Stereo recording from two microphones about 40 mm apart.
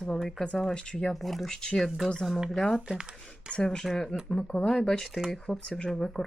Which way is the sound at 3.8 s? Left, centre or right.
Centre.